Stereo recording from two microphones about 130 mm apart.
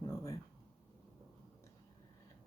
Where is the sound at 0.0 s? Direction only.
25° left (ahead or behind).